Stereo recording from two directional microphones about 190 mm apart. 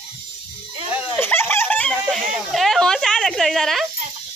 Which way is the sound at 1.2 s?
10° left (ahead or behind).